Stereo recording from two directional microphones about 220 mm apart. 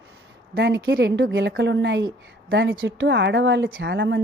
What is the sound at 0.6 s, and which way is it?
A woman's voice, 55° right (ahead or behind).